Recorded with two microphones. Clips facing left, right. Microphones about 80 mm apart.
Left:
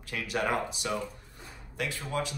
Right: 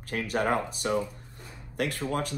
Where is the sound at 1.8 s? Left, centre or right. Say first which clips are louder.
Right 5 dB; right.